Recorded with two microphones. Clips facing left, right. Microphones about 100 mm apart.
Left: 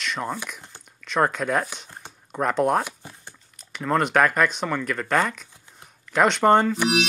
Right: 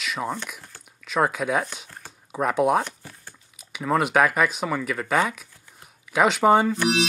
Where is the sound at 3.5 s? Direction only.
5° right (ahead or behind).